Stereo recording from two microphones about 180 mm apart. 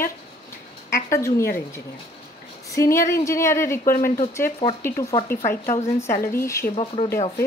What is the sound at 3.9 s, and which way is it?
Speech, 50° left (ahead or behind).